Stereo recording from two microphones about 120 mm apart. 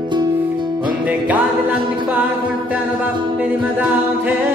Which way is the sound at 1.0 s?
15° right (ahead or behind).